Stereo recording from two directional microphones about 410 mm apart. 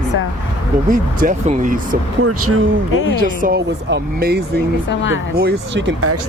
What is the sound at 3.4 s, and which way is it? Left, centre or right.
Speech, right.